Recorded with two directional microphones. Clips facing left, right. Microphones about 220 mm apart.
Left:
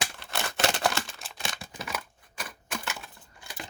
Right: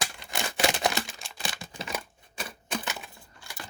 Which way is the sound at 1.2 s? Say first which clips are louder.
Even; centre (ahead or behind).